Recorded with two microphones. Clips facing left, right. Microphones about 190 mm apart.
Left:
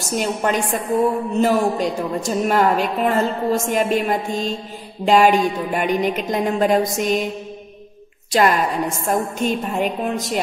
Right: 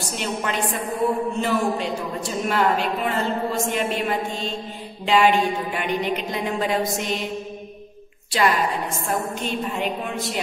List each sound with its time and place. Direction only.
0.0 s a woman's voice: 45° left (ahead or behind)
8.3 s a woman's voice: 45° left (ahead or behind)